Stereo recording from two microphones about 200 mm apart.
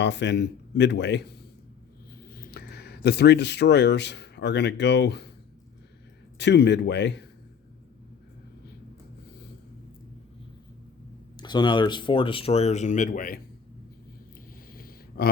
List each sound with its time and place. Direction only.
0.0 s speech: 60° left (ahead or behind)
2.2 s speech: 50° left (ahead or behind)
6.3 s speech: 60° left (ahead or behind)
11.3 s speech: 20° left (ahead or behind); by 13.4 s 45° left (ahead or behind)
14.7 s a sound: 45° left (ahead or behind)